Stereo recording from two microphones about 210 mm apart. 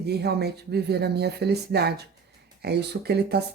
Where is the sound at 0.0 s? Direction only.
50° right (ahead or behind).